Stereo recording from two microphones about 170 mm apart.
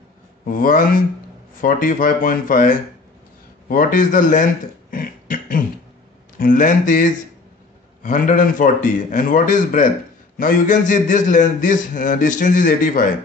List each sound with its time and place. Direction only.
0.5 s a man's voice: 50° left (ahead or behind)
4.9 s a sound: 55° left (ahead or behind)
6.3 s a man's voice: 50° left (ahead or behind)